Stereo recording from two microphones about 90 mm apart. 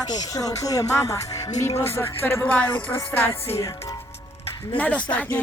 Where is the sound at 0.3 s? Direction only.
40° left (ahead or behind); by 3.3 s 25° left (ahead or behind).